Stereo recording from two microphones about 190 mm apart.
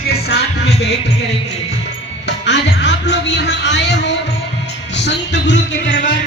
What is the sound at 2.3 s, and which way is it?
Music, 65° left (ahead or behind).